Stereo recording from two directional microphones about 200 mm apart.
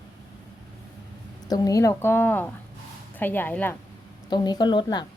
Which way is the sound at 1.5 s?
20° left (ahead or behind).